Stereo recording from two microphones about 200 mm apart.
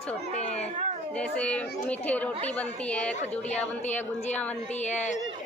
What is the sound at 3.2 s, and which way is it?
Speech, 35° left (ahead or behind).